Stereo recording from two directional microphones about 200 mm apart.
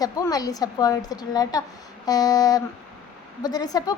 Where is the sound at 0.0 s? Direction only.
20° left (ahead or behind).